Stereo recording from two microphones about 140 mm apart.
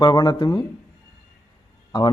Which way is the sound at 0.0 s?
30° left (ahead or behind).